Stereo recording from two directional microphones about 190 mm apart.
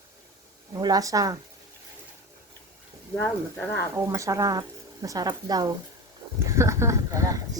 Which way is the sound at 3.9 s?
15° right (ahead or behind).